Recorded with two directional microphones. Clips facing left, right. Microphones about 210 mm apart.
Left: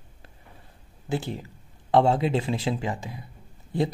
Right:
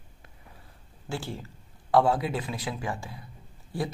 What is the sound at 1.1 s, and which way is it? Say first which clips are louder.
Speech: left 5 dB; 20° left (ahead or behind).